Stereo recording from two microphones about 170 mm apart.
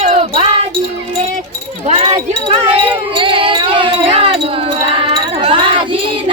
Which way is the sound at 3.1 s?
30° right (ahead or behind).